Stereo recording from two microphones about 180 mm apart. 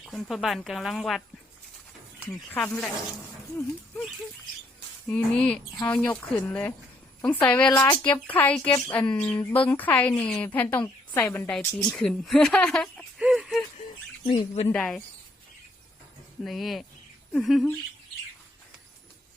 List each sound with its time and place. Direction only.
0.0 s a woman's voice: centre (ahead or behind)
2.5 s speech: 5° left (ahead or behind)
5.1 s speech: 5° left (ahead or behind)
11.9 s a sound: centre (ahead or behind)
14.3 s speech: 35° left (ahead or behind)
14.7 s a woman's voice: 5° left (ahead or behind)
16.4 s a woman's voice: centre (ahead or behind)